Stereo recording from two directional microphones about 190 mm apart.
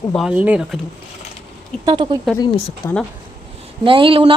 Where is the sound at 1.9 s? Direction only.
25° right (ahead or behind).